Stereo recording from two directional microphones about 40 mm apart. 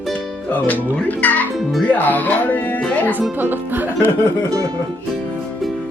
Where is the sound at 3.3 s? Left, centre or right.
Right.